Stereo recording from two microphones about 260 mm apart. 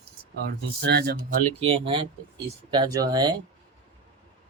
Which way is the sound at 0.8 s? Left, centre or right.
Right.